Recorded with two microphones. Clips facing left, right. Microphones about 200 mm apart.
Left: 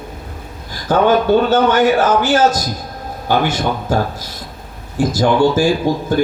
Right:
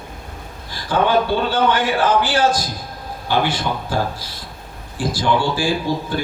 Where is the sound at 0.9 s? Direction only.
45° left (ahead or behind).